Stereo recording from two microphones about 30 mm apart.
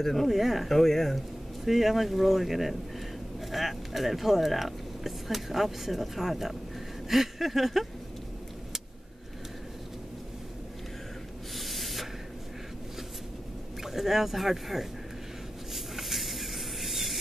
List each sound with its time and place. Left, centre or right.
0.0 s speech: centre
0.3 s speech: centre
0.7 s speech: centre
1.6 s speech: centre
11.5 s a sound: centre
13.8 s speech: centre
15.7 s a sound: centre